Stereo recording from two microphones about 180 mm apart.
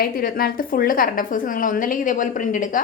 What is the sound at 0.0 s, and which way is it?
A woman's voice, 55° left (ahead or behind).